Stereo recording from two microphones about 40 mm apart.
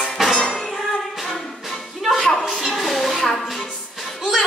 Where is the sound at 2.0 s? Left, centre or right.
Centre.